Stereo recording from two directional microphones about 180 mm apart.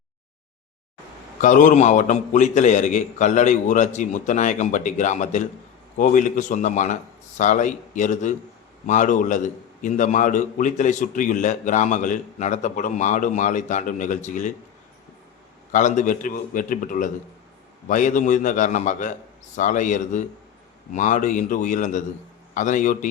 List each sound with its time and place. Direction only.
1.4 s a man's voice: 45° left (ahead or behind)
15.7 s a man's voice: 45° left (ahead or behind)